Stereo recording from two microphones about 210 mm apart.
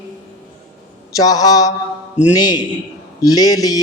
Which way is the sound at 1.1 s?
15° left (ahead or behind).